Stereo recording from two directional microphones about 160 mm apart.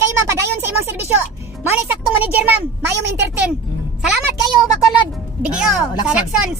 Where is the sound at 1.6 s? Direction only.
10° right (ahead or behind).